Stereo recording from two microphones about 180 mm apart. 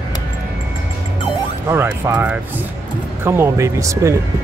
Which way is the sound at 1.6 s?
15° right (ahead or behind).